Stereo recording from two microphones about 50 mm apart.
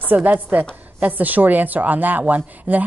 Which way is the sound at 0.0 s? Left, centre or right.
Right.